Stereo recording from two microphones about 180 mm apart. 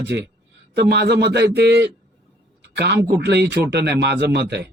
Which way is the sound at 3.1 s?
70° right (ahead or behind).